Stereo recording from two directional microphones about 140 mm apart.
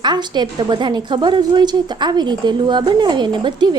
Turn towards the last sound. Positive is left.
turn(degrees=-30)  # may be behind; listen again after turning